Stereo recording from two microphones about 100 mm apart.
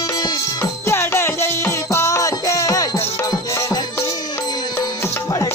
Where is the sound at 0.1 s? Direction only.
40° left (ahead or behind).